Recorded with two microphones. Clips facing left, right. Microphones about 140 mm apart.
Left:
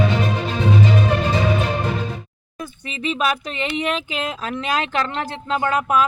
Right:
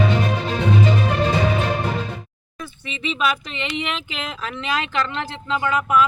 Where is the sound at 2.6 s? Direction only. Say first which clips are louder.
Left 2 dB; 40° left (ahead or behind).